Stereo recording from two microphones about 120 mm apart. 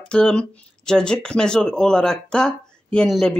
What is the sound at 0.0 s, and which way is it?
Speech, 5° left (ahead or behind).